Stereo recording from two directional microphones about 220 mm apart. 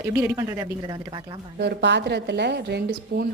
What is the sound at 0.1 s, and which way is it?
Speech, 10° right (ahead or behind).